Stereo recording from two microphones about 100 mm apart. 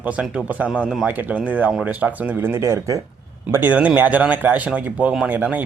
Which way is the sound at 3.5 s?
20° right (ahead or behind).